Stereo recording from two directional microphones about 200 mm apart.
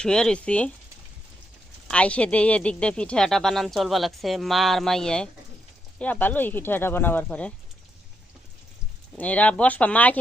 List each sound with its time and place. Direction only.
0.0 s a woman's voice: 5° left (ahead or behind)
1.9 s a woman's voice: 5° left (ahead or behind)
9.1 s speech: 5° left (ahead or behind)